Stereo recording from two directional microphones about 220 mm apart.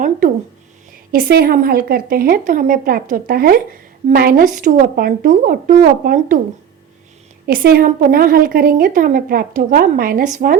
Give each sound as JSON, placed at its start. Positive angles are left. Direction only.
{"t": 1.1, "sound": "a woman's voice", "side_deg": -40}
{"t": 7.4, "sound": "a woman's voice", "side_deg": -40}